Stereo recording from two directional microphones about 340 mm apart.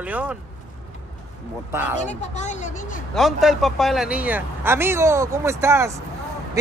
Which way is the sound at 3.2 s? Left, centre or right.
Centre.